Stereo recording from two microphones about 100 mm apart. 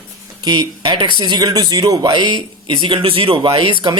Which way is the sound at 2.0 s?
50° right (ahead or behind).